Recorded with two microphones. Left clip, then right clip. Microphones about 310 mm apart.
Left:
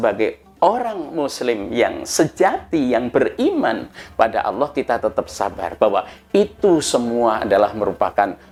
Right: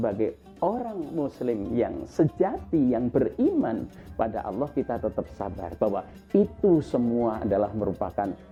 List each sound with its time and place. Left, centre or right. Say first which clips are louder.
0.0 s speech: left 9 dB; centre
4.4 s speech: left 10 dB; centre
4.7 s speech: left 9 dB; centre
7.0 s speech: left 7 dB; left
7.3 s speech: left 10 dB; centre